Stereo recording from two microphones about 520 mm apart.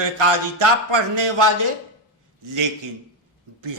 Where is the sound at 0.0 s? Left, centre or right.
Right.